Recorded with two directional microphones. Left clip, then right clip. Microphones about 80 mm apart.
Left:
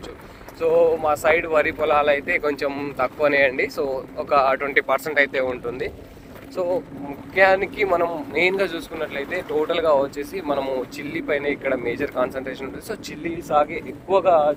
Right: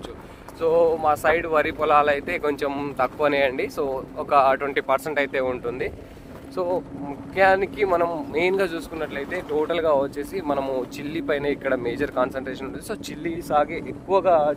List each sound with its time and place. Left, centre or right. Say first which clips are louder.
0.6 s speech: left 2 dB; right
1.0 s speech: left 1 dB; right
1.8 s speech: even; right
2.7 s speech: even; right
3.4 s speech: left 3 dB; right
6.6 s speech: left 2 dB; right
7.3 s speech: left 2 dB; right
8.5 s speech: left 1 dB; right
10.6 s speech: left 1 dB; right
12.1 s speech: even; right
13.2 s speech: left 2 dB; right
14.1 s speech: left 2 dB; centre